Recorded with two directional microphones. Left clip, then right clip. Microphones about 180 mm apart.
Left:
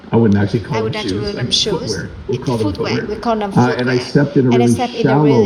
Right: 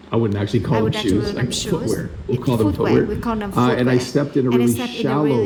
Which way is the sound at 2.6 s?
40° right (ahead or behind).